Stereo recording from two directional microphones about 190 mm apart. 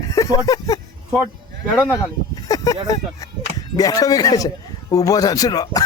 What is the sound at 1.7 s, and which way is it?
Speech, 10° left (ahead or behind).